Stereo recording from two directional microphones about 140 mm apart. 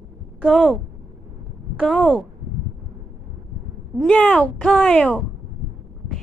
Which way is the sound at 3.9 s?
10° left (ahead or behind).